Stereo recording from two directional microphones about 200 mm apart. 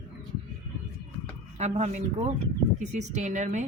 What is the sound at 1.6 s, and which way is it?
A woman's voice, 35° right (ahead or behind).